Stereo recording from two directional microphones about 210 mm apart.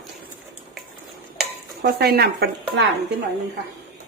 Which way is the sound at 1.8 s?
50° right (ahead or behind).